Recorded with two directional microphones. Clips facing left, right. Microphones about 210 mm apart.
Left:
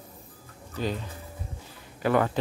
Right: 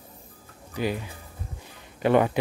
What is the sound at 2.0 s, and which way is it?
Speech, 20° right (ahead or behind).